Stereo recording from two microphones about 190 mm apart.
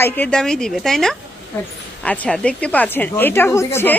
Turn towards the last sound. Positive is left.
turn(degrees=10)  # may be behind; listen again after turning